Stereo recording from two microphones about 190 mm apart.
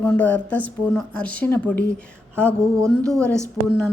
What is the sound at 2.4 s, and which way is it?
Speech, 15° right (ahead or behind).